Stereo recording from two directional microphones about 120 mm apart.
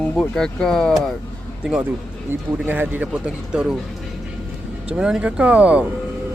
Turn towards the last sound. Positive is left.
turn(degrees=-10)  # may be behind; listen again after turning